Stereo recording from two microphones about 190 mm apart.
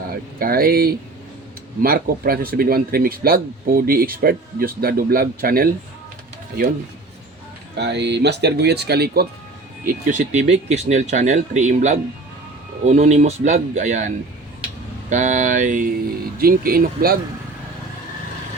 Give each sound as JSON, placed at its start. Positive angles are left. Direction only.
{"t": 0.1, "sound": "speech", "side_deg": -50}
{"t": 7.8, "sound": "speech", "side_deg": -65}
{"t": 9.8, "sound": "speech", "side_deg": -40}
{"t": 15.1, "sound": "speech", "side_deg": -40}